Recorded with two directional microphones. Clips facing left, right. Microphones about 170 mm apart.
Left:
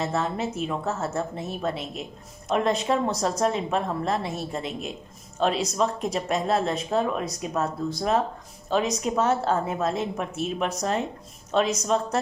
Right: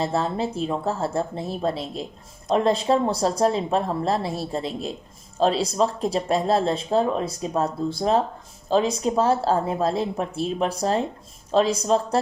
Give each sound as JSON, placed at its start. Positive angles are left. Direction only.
{"t": 0.0, "sound": "speech", "side_deg": -30}